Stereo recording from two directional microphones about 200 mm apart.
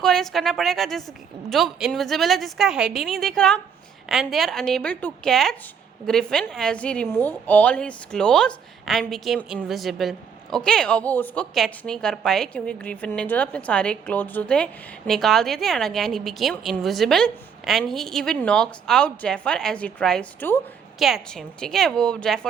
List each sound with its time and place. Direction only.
0.0 s a woman's voice: centre (ahead or behind)